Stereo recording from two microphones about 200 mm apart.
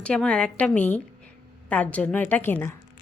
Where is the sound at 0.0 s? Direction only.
5° left (ahead or behind).